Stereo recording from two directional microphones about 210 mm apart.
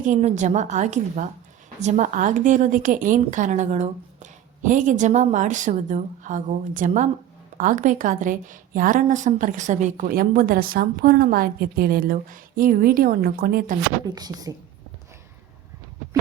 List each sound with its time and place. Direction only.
0.0 s a woman's voice: 35° right (ahead or behind)
14.2 s a woman's voice: 20° right (ahead or behind)